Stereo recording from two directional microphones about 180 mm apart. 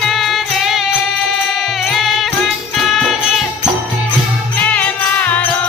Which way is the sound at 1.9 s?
Centre (ahead or behind).